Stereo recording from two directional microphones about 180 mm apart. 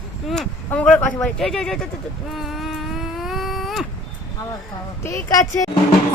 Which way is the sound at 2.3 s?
Centre (ahead or behind).